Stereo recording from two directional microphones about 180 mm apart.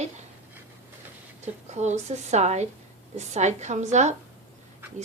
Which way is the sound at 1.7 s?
40° right (ahead or behind).